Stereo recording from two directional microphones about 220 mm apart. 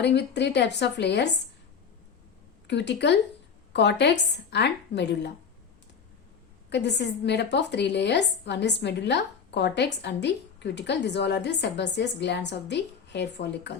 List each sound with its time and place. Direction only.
0.0 s speech: 50° left (ahead or behind)
2.6 s speech: 50° left (ahead or behind)
6.7 s speech: 50° left (ahead or behind)